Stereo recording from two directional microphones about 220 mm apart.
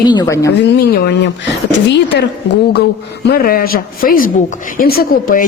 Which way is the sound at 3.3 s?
40° left (ahead or behind).